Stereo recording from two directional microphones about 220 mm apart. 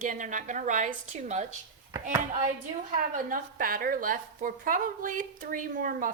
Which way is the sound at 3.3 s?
40° right (ahead or behind).